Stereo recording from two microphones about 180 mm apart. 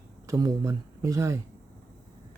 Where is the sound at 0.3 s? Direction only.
20° right (ahead or behind).